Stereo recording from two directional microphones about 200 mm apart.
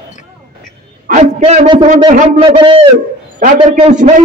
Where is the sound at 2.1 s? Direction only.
40° right (ahead or behind).